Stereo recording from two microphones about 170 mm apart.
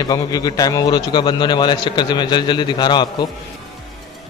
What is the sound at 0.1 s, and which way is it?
A man's voice, 25° left (ahead or behind).